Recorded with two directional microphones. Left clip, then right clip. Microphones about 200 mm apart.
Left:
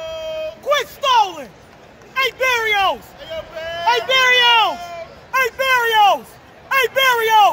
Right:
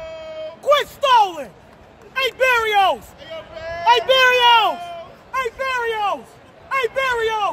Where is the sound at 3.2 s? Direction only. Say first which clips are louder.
Left 4 dB; 35° left (ahead or behind).